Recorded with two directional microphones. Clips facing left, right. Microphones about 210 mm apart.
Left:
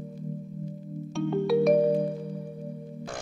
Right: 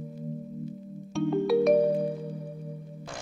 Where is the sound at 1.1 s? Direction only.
Centre (ahead or behind).